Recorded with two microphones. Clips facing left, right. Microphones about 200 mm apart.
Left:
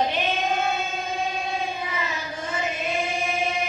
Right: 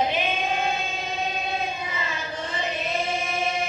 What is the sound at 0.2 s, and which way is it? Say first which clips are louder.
Singing: left 1 dB; 15° right (ahead or behind).